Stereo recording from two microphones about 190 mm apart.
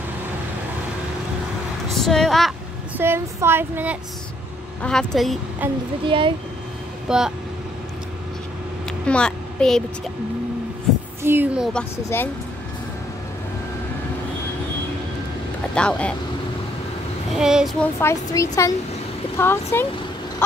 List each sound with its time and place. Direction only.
2.0 s speech: centre (ahead or behind)
3.0 s child singing: 10° right (ahead or behind)
4.8 s speech: centre (ahead or behind)
6.0 s speech: 25° right (ahead or behind)
7.1 s speech: 5° right (ahead or behind)
9.0 s a child's voice: 5° left (ahead or behind)
11.2 s child singing: 10° right (ahead or behind)
12.1 s a woman's voice: 10° left (ahead or behind)
15.7 s speech: 5° left (ahead or behind)
17.4 s speech: 5° right (ahead or behind)
18.0 s a woman's voice: 15° left (ahead or behind)